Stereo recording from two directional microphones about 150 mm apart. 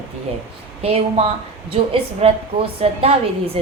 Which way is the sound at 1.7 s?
40° right (ahead or behind).